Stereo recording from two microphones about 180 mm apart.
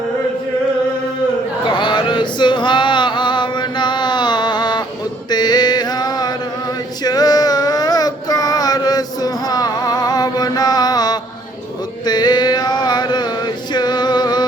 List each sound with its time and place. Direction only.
1.6 s male singing: 25° left (ahead or behind)
5.3 s mantra: 25° left (ahead or behind)
12.0 s male singing: 25° left (ahead or behind)